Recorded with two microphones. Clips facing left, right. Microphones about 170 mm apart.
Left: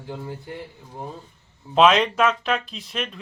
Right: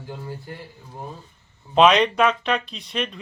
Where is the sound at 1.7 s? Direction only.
Centre (ahead or behind).